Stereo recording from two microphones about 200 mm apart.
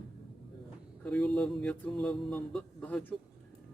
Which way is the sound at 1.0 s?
5° left (ahead or behind).